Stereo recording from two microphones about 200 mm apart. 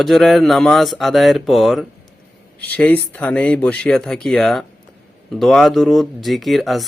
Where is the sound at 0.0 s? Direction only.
Centre (ahead or behind).